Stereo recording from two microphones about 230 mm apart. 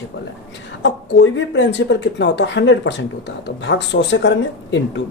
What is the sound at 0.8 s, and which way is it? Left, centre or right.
Speech, left.